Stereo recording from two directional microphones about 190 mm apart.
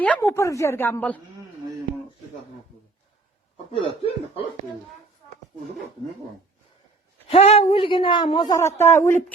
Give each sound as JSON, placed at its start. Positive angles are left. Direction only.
{"t": 0.0, "sound": "a woman's voice", "side_deg": 10}
{"t": 3.7, "sound": "speech", "side_deg": 30}
{"t": 7.3, "sound": "speech", "side_deg": 30}